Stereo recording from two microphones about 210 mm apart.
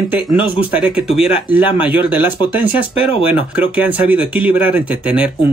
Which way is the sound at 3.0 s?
25° left (ahead or behind).